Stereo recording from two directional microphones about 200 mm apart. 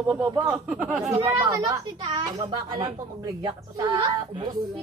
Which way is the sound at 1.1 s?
30° right (ahead or behind).